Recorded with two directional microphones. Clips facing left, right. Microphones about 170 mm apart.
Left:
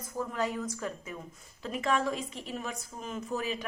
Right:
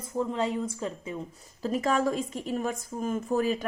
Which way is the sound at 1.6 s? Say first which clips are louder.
Right 4 dB; 40° right (ahead or behind).